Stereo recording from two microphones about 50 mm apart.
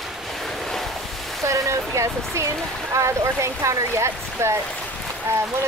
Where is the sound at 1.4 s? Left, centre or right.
Right.